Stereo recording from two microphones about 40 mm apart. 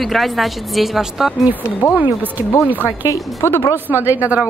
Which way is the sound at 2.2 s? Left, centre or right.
Right.